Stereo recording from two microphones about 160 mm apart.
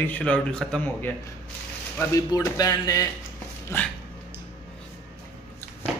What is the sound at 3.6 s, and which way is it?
Speech, 10° left (ahead or behind).